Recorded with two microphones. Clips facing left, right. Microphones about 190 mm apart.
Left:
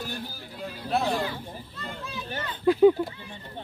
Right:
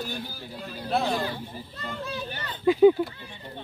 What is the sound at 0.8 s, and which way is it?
Speech, centre (ahead or behind).